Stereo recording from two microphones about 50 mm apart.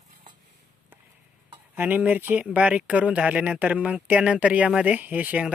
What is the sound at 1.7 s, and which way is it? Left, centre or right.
Speech, right.